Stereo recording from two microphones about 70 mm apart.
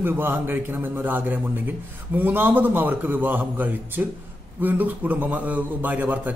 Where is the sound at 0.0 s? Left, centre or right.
Right.